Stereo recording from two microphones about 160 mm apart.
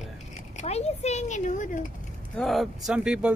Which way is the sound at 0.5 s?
40° left (ahead or behind).